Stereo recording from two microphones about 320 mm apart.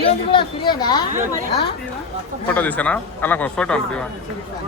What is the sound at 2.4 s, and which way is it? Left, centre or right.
A man's voice, centre.